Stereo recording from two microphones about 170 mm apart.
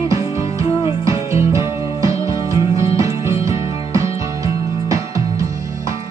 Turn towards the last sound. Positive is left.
turn(degrees=-20)  # may be behind; listen again after turning